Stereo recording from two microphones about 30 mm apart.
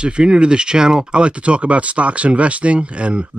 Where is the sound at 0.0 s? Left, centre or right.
Right.